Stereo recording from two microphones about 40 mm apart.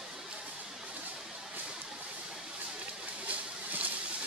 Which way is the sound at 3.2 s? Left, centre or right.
Right.